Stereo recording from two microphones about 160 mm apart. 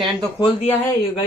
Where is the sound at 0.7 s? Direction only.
10° left (ahead or behind).